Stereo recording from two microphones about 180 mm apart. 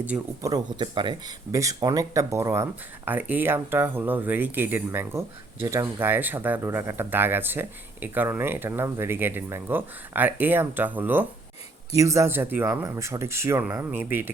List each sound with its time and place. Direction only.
0.0 s speech: 10° right (ahead or behind)
0.5 s speech: 25° right (ahead or behind)